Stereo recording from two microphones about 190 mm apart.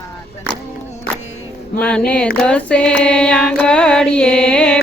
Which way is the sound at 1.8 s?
5° left (ahead or behind).